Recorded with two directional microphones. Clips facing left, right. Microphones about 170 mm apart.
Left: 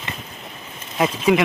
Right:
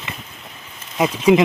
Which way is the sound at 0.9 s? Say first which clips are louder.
Right 2 dB; 10° right (ahead or behind).